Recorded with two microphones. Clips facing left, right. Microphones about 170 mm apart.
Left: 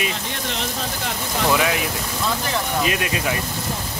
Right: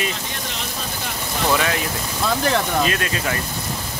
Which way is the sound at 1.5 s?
10° left (ahead or behind).